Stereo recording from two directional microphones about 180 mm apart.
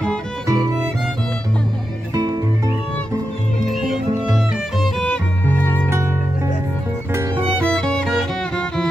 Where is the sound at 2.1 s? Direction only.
25° right (ahead or behind).